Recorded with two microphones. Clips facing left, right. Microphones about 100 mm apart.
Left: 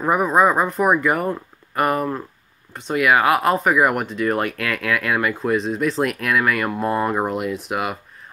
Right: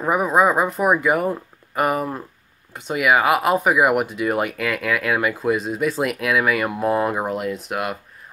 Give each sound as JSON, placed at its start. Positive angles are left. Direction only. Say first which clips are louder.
{"t": 0.0, "sound": "speech", "louder": "left 1 dB", "side_deg": -5}